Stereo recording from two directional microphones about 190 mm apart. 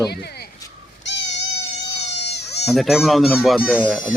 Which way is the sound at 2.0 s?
60° left (ahead or behind).